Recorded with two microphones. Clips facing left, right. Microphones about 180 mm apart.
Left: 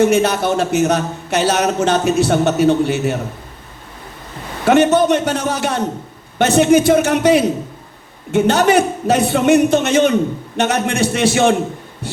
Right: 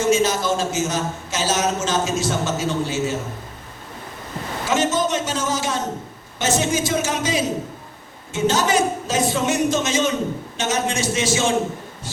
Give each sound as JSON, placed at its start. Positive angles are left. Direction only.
{"t": 0.0, "sound": "a man's voice", "side_deg": 60}
{"t": 4.6, "sound": "a man's voice", "side_deg": 60}
{"t": 12.0, "sound": "heart sounds", "side_deg": 60}